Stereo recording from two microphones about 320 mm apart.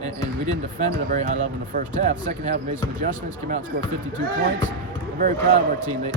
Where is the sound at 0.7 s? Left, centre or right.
Right.